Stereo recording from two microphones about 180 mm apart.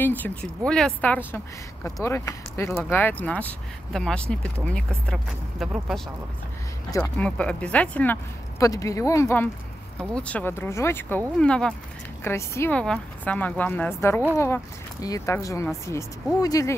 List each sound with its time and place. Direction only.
0.0 s speech: 10° left (ahead or behind)
6.9 s speech: 15° left (ahead or behind)